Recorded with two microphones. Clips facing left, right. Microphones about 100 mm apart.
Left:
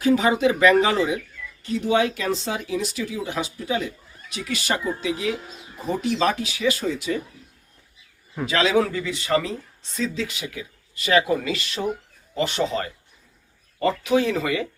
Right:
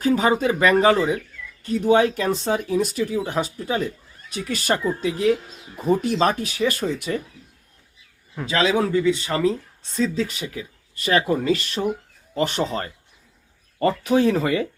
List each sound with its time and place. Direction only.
0.0 s speech: 40° right (ahead or behind)
8.4 s a man's voice: 5° left (ahead or behind)
9.0 s speech: 30° right (ahead or behind)
10.2 s speech: 40° right (ahead or behind)